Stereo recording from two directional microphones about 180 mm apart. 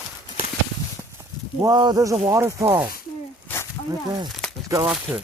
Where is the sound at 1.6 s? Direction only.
20° right (ahead or behind).